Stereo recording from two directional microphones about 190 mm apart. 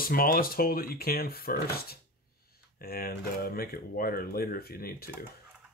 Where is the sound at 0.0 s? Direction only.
50° left (ahead or behind).